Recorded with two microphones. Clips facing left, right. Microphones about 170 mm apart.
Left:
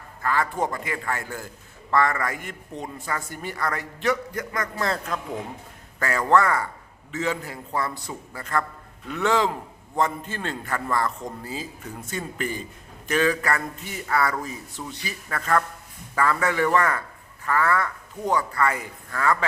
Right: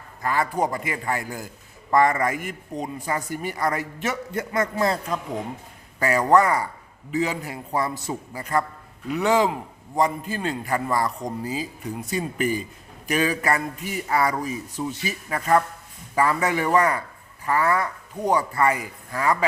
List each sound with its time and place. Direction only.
0.2 s a man's voice: 15° right (ahead or behind)